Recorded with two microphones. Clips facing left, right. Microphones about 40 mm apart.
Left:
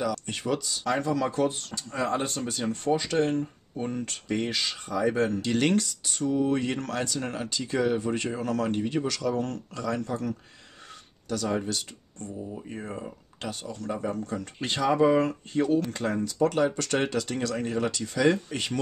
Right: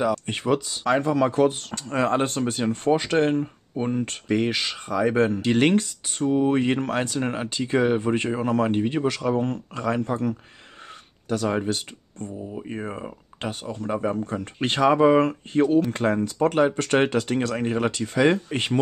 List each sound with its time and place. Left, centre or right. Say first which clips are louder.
0.0 s speech: right 6 dB; right